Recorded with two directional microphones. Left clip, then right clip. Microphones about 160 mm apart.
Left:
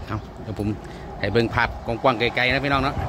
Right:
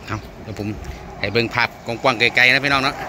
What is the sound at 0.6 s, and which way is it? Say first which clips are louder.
Speech: even; 20° left (ahead or behind).